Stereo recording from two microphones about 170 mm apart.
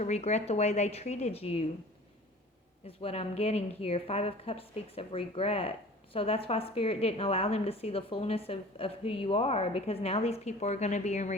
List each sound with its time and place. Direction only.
0.0 s a woman's voice: 40° left (ahead or behind)
2.8 s a woman's voice: 35° left (ahead or behind)